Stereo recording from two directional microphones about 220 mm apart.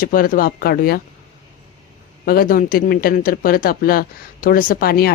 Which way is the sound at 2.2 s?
40° left (ahead or behind).